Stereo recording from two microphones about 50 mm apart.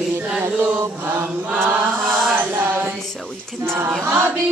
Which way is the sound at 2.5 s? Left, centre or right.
Right.